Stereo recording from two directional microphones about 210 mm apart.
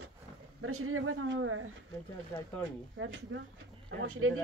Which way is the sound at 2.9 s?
65° right (ahead or behind).